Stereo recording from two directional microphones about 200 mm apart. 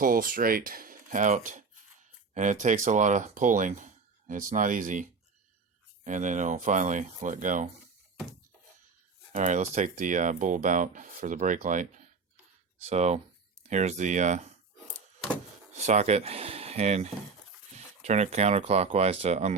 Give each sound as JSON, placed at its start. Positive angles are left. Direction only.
{"t": 0.0, "sound": "speech", "side_deg": -45}
{"t": 6.1, "sound": "speech", "side_deg": -40}
{"t": 9.3, "sound": "speech", "side_deg": -35}
{"t": 15.7, "sound": "speech", "side_deg": -35}